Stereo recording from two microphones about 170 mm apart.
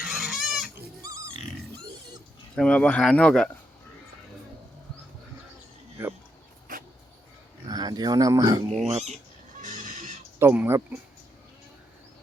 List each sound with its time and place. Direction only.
0.0 s chicken: centre (ahead or behind)
1.0 s pig: 20° right (ahead or behind)
2.6 s speech: 5° left (ahead or behind)
7.7 s speech: 25° right (ahead or behind)
8.9 s speech: 40° right (ahead or behind)
9.6 s neigh: 45° right (ahead or behind)
10.4 s speech: 10° right (ahead or behind)